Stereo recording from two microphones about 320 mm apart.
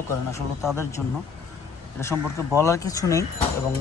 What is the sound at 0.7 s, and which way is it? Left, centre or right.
Speech, centre.